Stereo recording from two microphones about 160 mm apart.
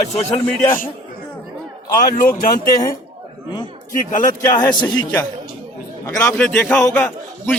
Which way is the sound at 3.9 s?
55° left (ahead or behind).